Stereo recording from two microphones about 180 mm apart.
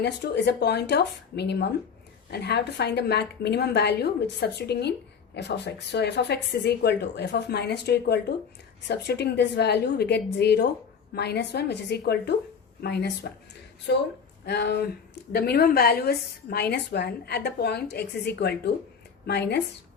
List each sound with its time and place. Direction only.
0.0 s a woman's voice: 70° left (ahead or behind)